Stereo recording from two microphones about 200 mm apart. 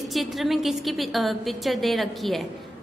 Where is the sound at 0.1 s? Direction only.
Centre (ahead or behind).